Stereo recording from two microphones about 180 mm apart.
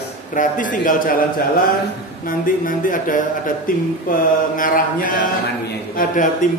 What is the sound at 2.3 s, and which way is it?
A man's voice, 50° left (ahead or behind).